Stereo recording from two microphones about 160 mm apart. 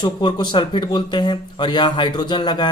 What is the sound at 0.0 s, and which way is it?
Speech, 25° left (ahead or behind).